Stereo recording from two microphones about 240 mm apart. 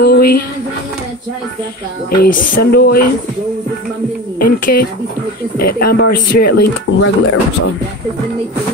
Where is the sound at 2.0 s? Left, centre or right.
Left.